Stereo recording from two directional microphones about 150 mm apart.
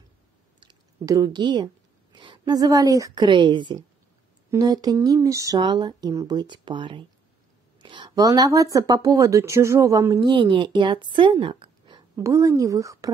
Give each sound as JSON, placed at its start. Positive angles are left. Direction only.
{"t": 0.6, "sound": "a woman's voice", "side_deg": -25}
{"t": 10.3, "sound": "a woman's voice", "side_deg": -35}
{"t": 12.2, "sound": "speech", "side_deg": -20}